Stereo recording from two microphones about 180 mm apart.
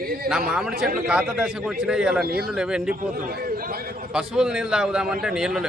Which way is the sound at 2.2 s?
60° right (ahead or behind).